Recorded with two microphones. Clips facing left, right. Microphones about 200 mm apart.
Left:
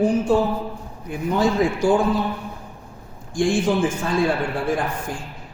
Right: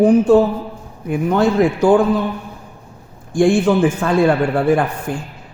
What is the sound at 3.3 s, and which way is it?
A man's voice, 60° right (ahead or behind).